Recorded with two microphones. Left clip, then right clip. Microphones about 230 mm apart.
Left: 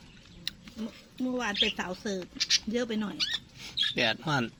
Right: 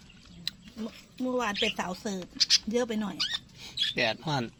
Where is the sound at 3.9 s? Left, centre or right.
Centre.